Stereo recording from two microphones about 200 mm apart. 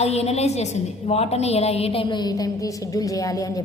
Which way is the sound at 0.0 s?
30° left (ahead or behind).